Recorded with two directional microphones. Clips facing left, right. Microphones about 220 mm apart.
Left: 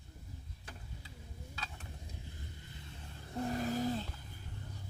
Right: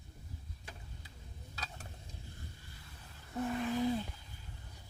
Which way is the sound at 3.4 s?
40° left (ahead or behind).